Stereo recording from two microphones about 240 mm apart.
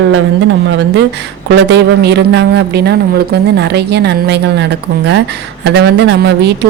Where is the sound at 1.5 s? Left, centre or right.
Right.